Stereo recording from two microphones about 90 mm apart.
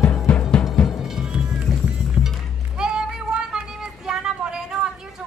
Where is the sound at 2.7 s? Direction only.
10° right (ahead or behind).